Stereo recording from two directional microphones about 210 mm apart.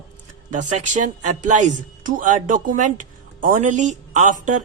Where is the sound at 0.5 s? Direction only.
35° right (ahead or behind).